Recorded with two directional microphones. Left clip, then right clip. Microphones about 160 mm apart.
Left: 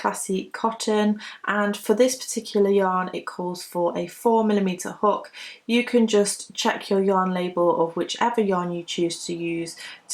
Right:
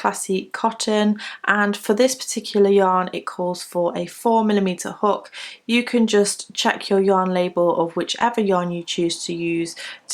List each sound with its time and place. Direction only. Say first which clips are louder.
0.0 s speech: right 4 dB; 30° right (ahead or behind)